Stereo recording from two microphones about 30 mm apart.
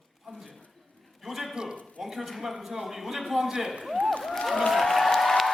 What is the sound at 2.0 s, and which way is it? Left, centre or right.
A man's voice, centre.